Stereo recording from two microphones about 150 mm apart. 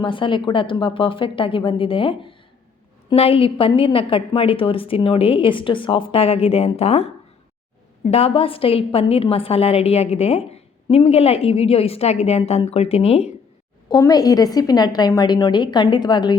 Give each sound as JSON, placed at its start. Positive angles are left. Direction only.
{"t": 0.0, "sound": "a woman's voice", "side_deg": 35}
{"t": 13.9, "sound": "a woman's voice", "side_deg": 25}